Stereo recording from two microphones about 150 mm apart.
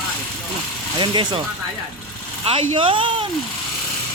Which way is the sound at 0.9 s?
30° right (ahead or behind).